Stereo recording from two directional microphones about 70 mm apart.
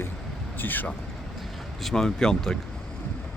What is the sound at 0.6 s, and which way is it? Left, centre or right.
Speech, left.